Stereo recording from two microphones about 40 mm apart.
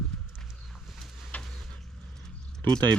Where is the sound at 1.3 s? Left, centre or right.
Left.